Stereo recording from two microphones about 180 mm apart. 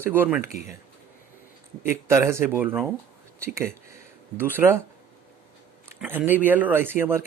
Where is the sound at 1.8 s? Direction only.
15° right (ahead or behind).